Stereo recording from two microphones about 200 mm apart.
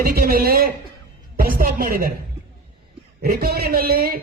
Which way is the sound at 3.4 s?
50° right (ahead or behind).